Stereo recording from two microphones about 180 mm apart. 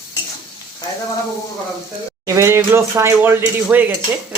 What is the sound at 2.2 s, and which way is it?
Speech, 15° right (ahead or behind).